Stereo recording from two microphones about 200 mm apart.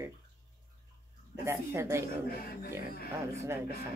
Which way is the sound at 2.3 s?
50° left (ahead or behind).